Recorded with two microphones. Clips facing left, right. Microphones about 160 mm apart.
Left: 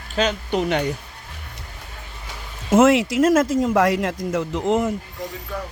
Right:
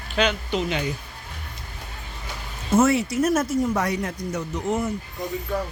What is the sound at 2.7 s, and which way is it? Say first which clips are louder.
Speech: left 4 dB; 90° left.